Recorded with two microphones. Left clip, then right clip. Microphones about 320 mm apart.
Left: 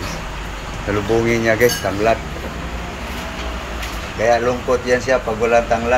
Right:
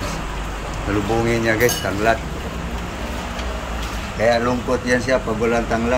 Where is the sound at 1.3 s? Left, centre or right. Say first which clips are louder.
Left 2 dB; centre.